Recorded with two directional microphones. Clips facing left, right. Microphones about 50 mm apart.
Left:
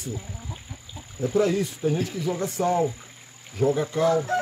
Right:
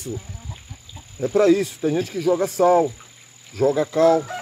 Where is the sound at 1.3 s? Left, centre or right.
Right.